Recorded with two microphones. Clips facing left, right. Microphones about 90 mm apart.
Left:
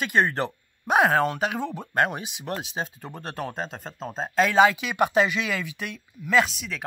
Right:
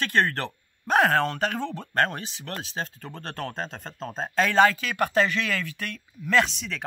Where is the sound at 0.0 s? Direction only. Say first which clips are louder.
Left 1 dB; 15° left (ahead or behind).